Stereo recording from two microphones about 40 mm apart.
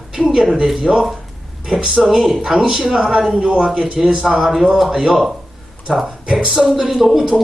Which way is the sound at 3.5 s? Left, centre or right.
Right.